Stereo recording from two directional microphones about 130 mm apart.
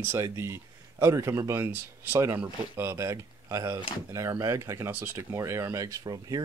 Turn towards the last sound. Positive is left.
turn(degrees=-30)  # may be behind; listen again after turning